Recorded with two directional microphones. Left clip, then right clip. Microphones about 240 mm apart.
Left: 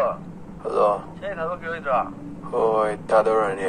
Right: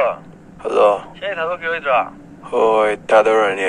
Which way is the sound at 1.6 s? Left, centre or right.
Right.